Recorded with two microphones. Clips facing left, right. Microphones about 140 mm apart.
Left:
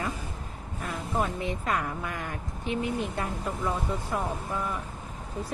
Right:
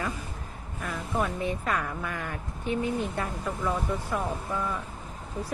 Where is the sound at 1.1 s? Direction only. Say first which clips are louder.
Right 1 dB; 20° left (ahead or behind).